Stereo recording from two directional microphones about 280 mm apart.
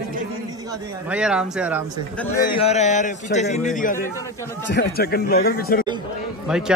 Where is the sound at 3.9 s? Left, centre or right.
Centre.